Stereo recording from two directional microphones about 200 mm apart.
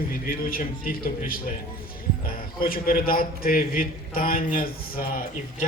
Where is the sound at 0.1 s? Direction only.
45° left (ahead or behind).